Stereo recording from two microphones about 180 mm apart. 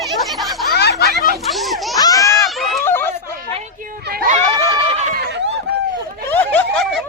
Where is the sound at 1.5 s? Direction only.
Centre (ahead or behind).